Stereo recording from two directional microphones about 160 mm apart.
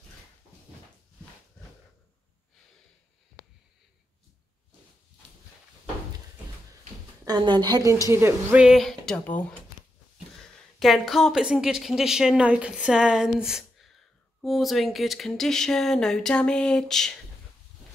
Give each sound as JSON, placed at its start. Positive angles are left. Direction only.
{"t": 7.2, "sound": "a woman's voice", "side_deg": -30}